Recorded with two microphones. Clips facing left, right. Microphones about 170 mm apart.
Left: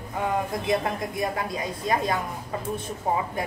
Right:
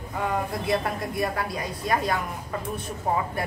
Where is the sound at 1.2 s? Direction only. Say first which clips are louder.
Right 1 dB; 20° left (ahead or behind).